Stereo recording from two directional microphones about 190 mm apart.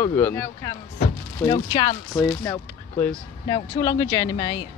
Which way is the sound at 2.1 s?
15° left (ahead or behind).